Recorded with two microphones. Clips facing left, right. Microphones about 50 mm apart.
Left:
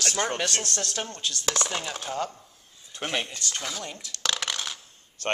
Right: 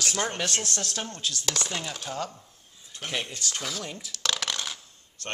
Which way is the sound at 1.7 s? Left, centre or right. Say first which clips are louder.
Left 2 dB; left.